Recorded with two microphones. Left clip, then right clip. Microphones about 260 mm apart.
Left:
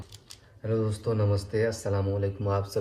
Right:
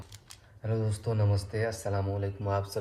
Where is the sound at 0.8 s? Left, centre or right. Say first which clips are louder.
Left 4 dB; centre.